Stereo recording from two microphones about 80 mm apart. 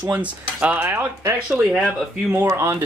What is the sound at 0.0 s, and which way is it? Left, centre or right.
Speech, centre.